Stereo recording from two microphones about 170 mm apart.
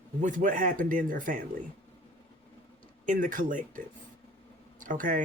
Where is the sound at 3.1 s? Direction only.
50° right (ahead or behind).